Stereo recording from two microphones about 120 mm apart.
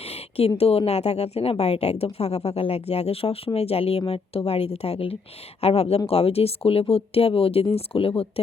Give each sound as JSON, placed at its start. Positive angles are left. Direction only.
{"t": 0.3, "sound": "speech", "side_deg": 55}